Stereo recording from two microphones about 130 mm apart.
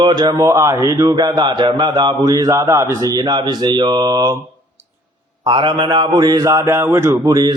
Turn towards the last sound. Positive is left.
turn(degrees=-30)  # may be behind; listen again after turning